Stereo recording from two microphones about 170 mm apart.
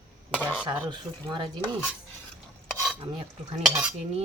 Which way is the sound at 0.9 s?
25° right (ahead or behind).